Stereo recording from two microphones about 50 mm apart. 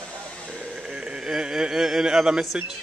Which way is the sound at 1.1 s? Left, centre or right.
Centre.